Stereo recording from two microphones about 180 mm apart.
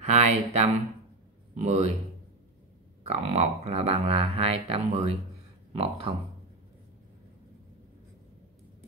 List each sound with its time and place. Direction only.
0.0 s a sound: 40° right (ahead or behind)
1.5 s speech: 40° right (ahead or behind)
3.1 s speech: 35° right (ahead or behind)